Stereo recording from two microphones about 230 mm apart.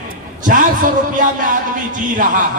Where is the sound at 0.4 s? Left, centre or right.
Right.